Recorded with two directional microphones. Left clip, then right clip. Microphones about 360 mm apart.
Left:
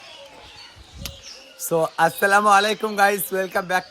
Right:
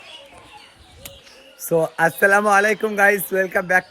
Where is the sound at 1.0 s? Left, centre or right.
Left.